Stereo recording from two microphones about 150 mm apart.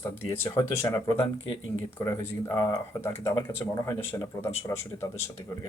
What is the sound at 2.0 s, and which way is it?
Speech, 20° left (ahead or behind).